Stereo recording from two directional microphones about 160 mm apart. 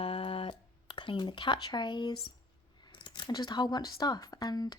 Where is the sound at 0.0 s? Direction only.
35° left (ahead or behind).